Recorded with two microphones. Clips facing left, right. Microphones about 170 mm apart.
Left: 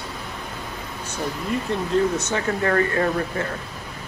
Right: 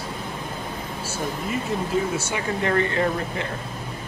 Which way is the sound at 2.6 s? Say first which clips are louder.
Even; 20° right (ahead or behind).